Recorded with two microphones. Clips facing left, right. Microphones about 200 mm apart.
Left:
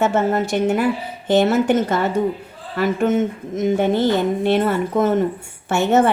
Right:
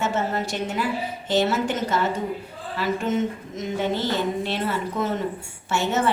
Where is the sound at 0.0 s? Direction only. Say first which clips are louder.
Left 7 dB; 55° left (ahead or behind).